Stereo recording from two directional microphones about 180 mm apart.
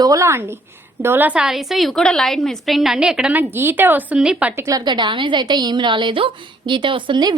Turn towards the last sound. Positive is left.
turn(degrees=-25)  # may be behind; listen again after turning